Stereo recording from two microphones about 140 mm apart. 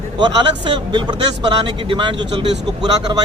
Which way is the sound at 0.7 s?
35° right (ahead or behind).